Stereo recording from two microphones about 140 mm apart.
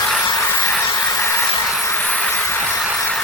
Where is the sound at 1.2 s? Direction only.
20° left (ahead or behind).